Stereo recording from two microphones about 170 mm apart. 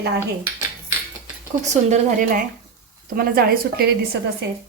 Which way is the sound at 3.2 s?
65° right (ahead or behind).